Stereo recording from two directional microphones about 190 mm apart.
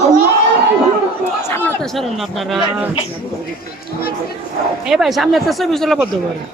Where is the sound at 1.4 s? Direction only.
10° left (ahead or behind).